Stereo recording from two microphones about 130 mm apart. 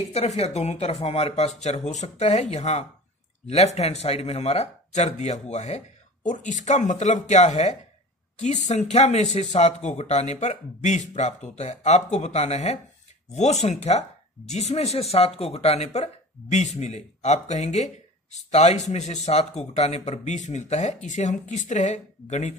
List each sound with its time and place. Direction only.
0.0 s speech: 55° left (ahead or behind)